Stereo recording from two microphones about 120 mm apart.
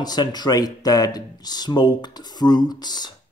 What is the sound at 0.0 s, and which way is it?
Speech, 35° left (ahead or behind).